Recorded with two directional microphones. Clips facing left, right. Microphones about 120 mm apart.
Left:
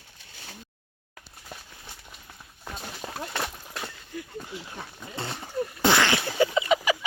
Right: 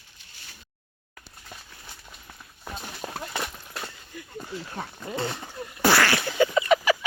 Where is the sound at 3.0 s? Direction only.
5° right (ahead or behind).